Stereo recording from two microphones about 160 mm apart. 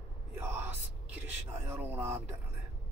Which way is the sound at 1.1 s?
10° right (ahead or behind).